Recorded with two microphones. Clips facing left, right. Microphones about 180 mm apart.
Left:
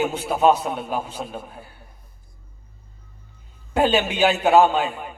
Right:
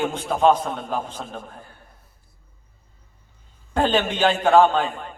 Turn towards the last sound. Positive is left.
turn(degrees=10)  # may be behind; listen again after turning